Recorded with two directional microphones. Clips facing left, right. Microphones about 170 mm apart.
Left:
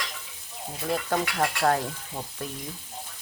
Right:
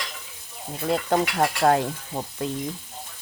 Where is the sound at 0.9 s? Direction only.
30° right (ahead or behind).